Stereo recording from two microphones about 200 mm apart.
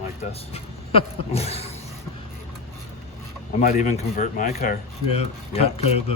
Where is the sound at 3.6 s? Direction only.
40° left (ahead or behind).